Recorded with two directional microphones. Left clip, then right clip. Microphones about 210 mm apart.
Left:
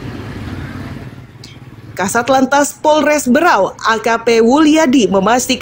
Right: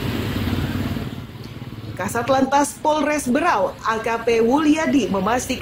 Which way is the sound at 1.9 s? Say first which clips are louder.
Left 7 dB; 40° left (ahead or behind).